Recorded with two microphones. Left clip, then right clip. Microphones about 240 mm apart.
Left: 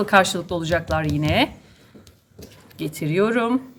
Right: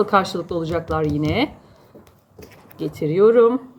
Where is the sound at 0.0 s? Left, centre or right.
Left.